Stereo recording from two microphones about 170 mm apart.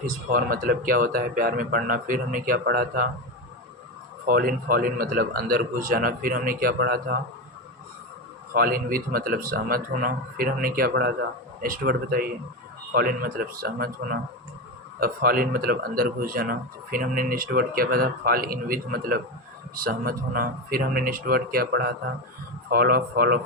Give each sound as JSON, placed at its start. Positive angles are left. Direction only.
{"t": 0.0, "sound": "speech", "side_deg": -55}
{"t": 4.3, "sound": "speech", "side_deg": -60}
{"t": 8.5, "sound": "speech", "side_deg": -60}